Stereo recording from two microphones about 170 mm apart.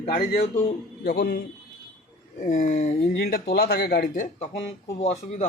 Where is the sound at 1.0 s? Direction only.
70° left (ahead or behind).